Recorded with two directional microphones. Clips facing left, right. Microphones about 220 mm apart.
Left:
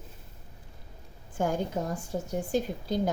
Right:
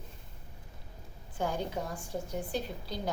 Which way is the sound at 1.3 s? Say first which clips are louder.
Left 5 dB; 45° left (ahead or behind).